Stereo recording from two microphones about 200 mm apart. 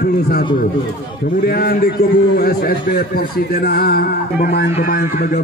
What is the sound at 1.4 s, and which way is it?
A man's voice, 50° left (ahead or behind).